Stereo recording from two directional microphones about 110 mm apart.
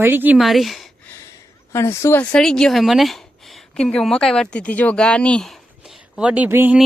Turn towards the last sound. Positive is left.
turn(degrees=-20)  # may be behind; listen again after turning